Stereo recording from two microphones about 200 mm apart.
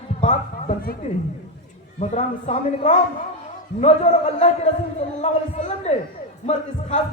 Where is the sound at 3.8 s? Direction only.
35° left (ahead or behind).